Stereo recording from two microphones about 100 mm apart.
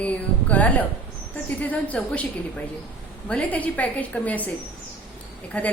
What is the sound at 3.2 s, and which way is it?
Speech, 15° left (ahead or behind).